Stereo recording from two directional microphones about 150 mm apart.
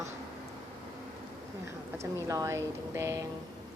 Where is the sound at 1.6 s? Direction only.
20° right (ahead or behind).